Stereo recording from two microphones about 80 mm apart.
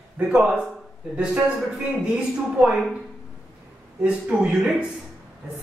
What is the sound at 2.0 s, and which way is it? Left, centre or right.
Speech, centre.